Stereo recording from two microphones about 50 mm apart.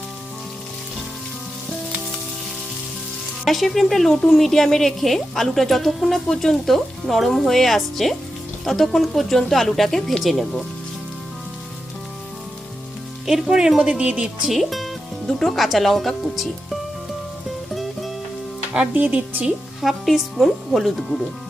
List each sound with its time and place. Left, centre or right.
3.4 s a woman's voice: centre
13.2 s speech: centre
14.4 s a woman's voice: centre
18.9 s speech: right
19.8 s a woman's voice: centre